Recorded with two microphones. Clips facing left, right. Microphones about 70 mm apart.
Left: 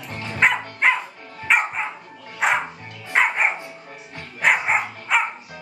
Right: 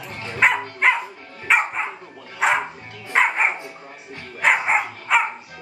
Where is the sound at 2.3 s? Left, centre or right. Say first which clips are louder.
Right 1 dB; centre.